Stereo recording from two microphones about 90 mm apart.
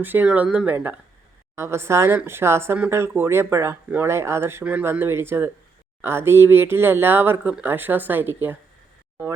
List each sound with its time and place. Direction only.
0.0 s speech: 20° right (ahead or behind)
4.6 s speech: 15° right (ahead or behind)
4.9 s speech: 25° right (ahead or behind)